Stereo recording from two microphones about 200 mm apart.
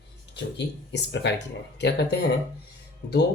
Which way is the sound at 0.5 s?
60° left (ahead or behind).